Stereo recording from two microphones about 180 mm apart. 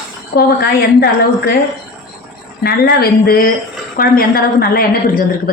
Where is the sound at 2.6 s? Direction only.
60° left (ahead or behind).